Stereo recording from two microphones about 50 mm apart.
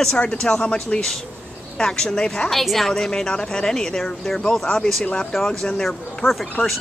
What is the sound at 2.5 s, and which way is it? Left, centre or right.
A woman's voice, centre.